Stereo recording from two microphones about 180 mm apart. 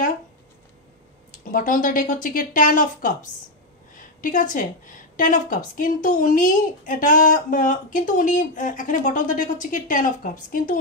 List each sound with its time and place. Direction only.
1.5 s a woman's voice: 50° left (ahead or behind)